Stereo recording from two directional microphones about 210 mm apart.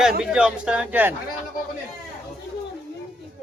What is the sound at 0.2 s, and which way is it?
Speech, 5° right (ahead or behind).